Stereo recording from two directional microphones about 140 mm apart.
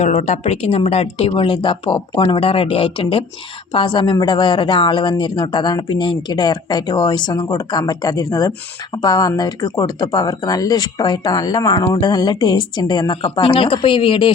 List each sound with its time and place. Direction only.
0.0 s speech: 50° left (ahead or behind)